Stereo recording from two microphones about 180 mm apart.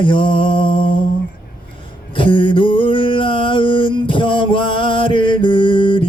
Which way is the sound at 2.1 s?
30° left (ahead or behind).